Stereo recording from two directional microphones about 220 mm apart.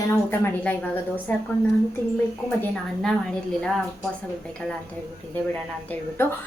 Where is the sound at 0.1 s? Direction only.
10° left (ahead or behind).